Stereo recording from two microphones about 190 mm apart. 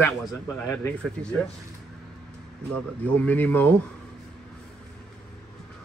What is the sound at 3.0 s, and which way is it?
Speech, 10° left (ahead or behind).